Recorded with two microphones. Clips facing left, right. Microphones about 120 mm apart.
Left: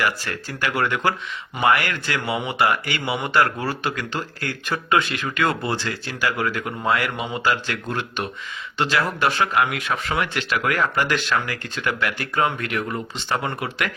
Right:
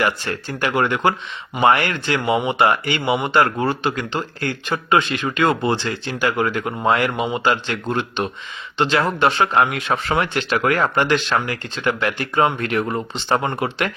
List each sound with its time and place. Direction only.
0.0 s speech: 25° right (ahead or behind)